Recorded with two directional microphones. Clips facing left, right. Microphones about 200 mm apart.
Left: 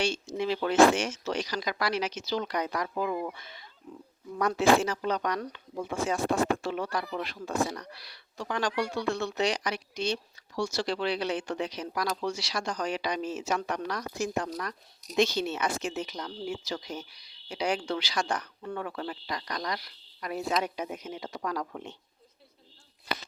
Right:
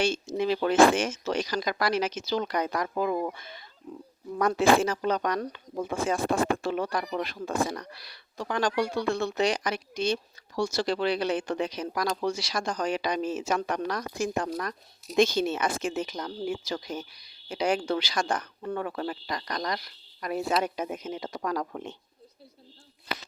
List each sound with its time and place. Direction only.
0.3 s speech: 50° right (ahead or behind)
18.6 s speech: 40° right (ahead or behind)